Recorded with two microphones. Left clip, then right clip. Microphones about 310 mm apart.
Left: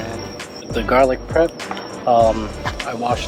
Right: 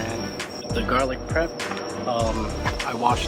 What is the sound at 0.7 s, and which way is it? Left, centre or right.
Speech, centre.